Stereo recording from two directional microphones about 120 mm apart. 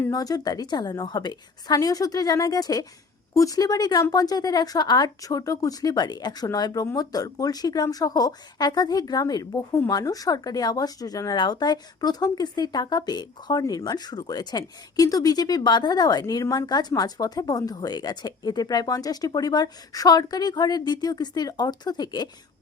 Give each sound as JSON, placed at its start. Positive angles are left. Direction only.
{"t": 0.1, "sound": "speech", "side_deg": 30}